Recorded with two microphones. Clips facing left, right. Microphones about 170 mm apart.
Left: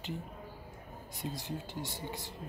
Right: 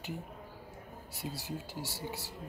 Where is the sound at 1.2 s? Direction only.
10° right (ahead or behind).